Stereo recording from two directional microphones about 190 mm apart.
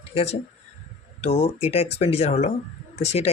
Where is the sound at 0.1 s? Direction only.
30° left (ahead or behind).